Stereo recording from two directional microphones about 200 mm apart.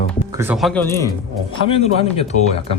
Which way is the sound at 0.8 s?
15° left (ahead or behind).